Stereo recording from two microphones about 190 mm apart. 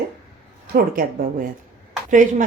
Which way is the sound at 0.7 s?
50° right (ahead or behind).